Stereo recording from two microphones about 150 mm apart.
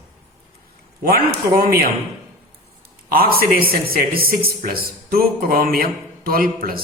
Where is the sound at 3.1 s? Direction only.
80° right.